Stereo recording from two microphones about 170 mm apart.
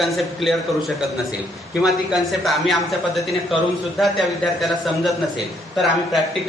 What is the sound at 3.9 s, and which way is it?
A man's voice, centre (ahead or behind).